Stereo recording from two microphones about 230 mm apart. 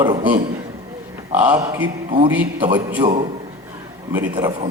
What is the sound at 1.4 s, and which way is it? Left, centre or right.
Speech, centre.